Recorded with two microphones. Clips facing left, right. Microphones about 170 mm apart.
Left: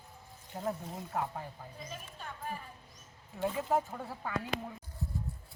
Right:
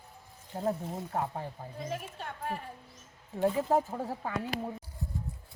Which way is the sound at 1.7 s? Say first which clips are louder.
Right 8 dB; 70° right (ahead or behind).